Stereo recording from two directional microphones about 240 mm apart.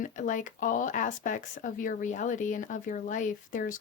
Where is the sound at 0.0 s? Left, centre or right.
Left.